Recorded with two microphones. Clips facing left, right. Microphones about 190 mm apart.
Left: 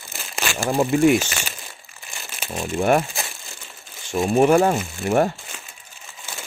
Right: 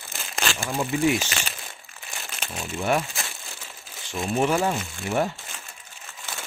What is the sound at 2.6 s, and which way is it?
Speech, 50° left (ahead or behind).